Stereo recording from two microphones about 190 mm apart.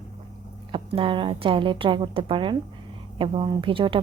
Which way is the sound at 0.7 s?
30° right (ahead or behind).